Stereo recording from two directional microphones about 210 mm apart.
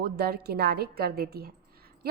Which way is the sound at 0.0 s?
50° right (ahead or behind).